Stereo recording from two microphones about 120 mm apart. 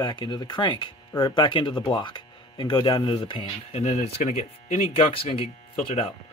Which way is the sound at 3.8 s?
65° left (ahead or behind).